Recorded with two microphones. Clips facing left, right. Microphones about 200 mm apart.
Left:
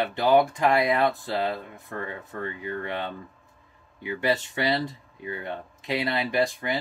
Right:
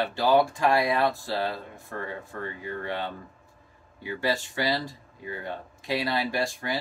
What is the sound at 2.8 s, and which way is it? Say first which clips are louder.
Speech: left 1 dB; 20° left (ahead or behind).